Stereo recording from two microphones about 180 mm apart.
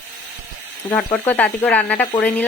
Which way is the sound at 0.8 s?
10° left (ahead or behind).